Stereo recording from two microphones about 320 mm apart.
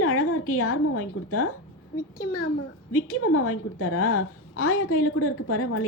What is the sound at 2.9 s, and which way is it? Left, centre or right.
A woman's voice, left.